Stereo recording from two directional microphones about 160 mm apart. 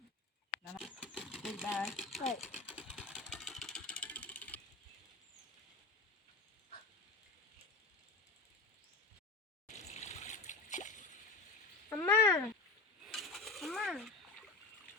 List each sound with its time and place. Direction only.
0.8 s vehicle: 5° right (ahead or behind)
1.7 s speech: 5° right (ahead or behind)
2.6 s sewing machine: 5° right (ahead or behind)
3.1 s vehicle: 5° right (ahead or behind)
3.3 s mechanisms: centre (ahead or behind)
9.6 s water: 45° left (ahead or behind)
11.9 s cat: 10° left (ahead or behind)
13.1 s coin: centre (ahead or behind)